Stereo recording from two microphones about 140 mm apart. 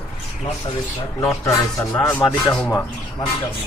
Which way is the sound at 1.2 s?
20° left (ahead or behind).